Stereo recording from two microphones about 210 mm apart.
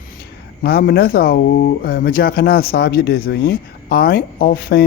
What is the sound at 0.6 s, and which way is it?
A man's voice, 50° left (ahead or behind).